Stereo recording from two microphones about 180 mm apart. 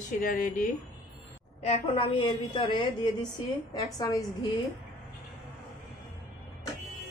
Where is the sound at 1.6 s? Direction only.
35° left (ahead or behind).